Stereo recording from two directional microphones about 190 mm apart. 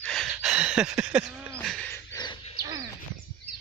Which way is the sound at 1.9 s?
20° left (ahead or behind).